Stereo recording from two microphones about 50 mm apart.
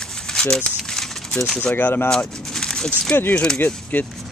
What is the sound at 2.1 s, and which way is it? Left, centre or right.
Speech, centre.